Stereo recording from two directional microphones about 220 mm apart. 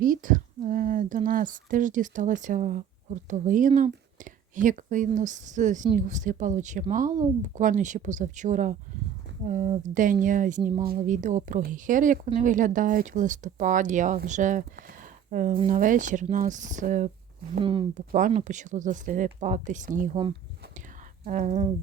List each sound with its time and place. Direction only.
0.0 s speech: 40° right (ahead or behind)
17.6 s speech: 25° right (ahead or behind)
18.1 s speech: 35° right (ahead or behind)
21.2 s speech: 35° right (ahead or behind)